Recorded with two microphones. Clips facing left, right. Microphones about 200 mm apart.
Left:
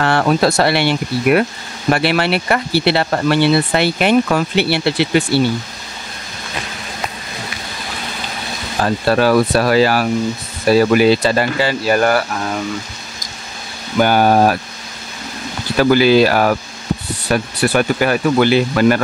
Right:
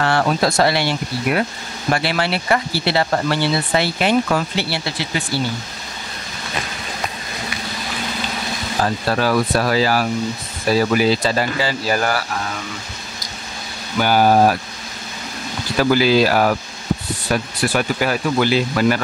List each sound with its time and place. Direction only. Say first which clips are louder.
0.0 s speech: left 3 dB; 60° left (ahead or behind)
8.8 s speech: left 6 dB; 65° left (ahead or behind)
14.0 s speech: left 1 dB; 55° left (ahead or behind)
15.8 s speech: left 4 dB; 65° left (ahead or behind)